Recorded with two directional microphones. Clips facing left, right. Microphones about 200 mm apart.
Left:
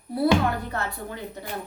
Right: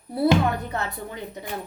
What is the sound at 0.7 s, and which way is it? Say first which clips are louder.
Speech: right 1 dB; 20° right (ahead or behind).